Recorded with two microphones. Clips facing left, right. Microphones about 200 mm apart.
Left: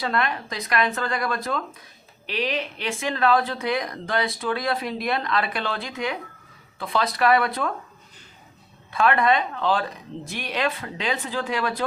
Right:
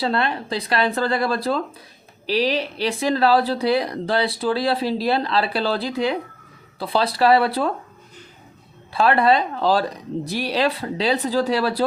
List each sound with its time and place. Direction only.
0.0 s speech: 30° right (ahead or behind)
8.9 s speech: 35° right (ahead or behind)